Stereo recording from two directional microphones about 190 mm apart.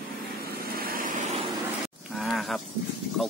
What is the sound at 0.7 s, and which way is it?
Vehicle, 50° right (ahead or behind).